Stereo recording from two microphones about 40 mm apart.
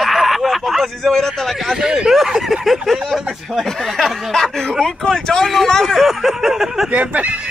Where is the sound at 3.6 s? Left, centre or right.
Centre.